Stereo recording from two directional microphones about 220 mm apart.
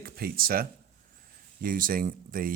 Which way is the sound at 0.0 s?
45° right (ahead or behind).